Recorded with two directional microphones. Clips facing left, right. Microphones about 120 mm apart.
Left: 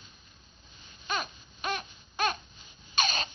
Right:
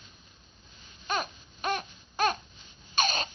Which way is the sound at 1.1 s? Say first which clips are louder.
Right 2 dB; 40° right (ahead or behind).